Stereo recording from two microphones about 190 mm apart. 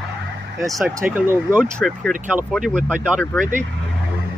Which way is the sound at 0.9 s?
10° right (ahead or behind).